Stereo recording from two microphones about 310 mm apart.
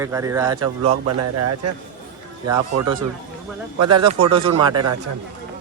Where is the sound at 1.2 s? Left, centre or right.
Right.